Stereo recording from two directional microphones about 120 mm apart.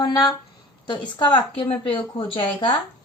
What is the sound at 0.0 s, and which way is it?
A woman's voice, 35° left (ahead or behind).